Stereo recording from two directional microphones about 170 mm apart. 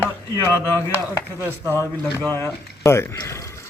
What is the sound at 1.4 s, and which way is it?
Speech, 15° right (ahead or behind).